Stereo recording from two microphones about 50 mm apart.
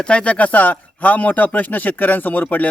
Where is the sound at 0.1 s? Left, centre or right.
Left.